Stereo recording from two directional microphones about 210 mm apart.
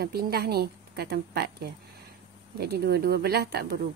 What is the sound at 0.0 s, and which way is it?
A woman's voice, 45° right (ahead or behind).